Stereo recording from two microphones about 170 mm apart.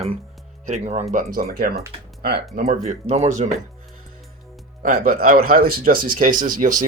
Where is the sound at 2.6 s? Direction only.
40° right (ahead or behind).